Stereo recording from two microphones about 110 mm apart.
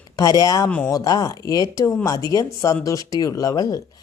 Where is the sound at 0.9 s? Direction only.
35° left (ahead or behind).